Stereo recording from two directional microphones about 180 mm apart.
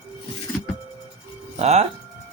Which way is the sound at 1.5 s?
35° right (ahead or behind).